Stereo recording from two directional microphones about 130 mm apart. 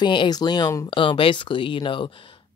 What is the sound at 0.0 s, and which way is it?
Speech, 35° left (ahead or behind).